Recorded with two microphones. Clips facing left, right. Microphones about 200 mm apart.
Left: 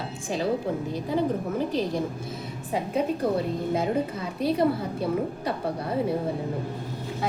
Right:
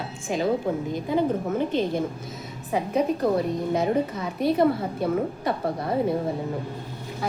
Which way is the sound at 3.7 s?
30° left (ahead or behind).